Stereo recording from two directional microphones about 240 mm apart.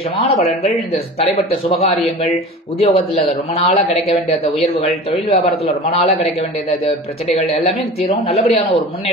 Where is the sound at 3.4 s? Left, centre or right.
Left.